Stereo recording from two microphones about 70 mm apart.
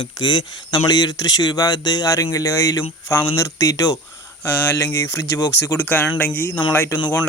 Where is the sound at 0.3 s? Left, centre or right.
Left.